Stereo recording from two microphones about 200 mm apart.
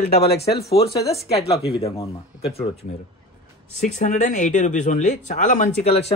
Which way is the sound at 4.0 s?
40° left (ahead or behind).